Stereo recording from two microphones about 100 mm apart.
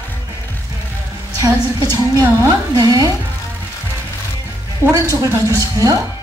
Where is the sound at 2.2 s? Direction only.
40° right (ahead or behind).